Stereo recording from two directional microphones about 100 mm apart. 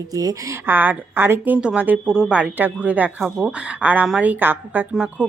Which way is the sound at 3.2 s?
5° right (ahead or behind).